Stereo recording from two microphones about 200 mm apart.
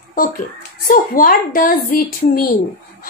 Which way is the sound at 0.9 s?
45° left (ahead or behind).